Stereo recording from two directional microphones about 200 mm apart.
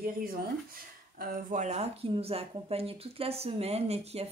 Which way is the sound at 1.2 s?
40° right (ahead or behind).